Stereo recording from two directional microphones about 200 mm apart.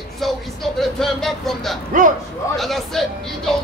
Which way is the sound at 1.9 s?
40° right (ahead or behind).